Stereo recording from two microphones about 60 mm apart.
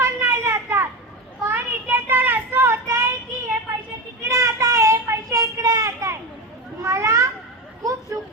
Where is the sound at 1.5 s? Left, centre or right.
Right.